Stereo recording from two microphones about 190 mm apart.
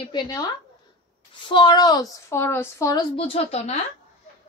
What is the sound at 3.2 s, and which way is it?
Speech, 30° left (ahead or behind).